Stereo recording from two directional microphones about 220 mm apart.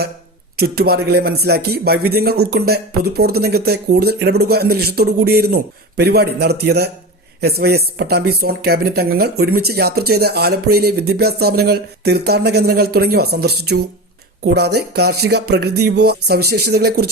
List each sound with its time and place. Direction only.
0.5 s speech: 45° right (ahead or behind)